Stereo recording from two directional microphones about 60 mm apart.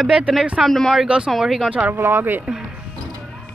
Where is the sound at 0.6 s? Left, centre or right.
Centre.